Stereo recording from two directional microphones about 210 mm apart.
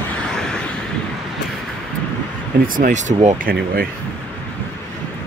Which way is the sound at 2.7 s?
35° right (ahead or behind).